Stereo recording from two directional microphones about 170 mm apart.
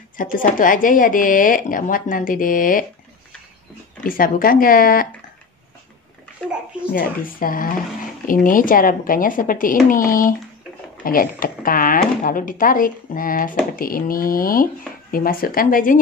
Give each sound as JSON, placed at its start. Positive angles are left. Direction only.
{"t": 0.2, "sound": "speech", "side_deg": 50}
{"t": 4.0, "sound": "speech", "side_deg": 55}
{"t": 6.9, "sound": "speech", "side_deg": 55}